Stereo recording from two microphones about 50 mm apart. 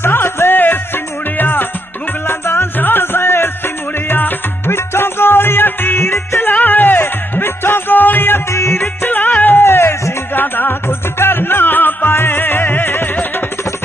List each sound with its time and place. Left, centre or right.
0.0 s music: left
2.2 s music: left
4.2 s music: left
4.7 s music: left
8.5 s music: left
9.0 s music: left
10.3 s music: left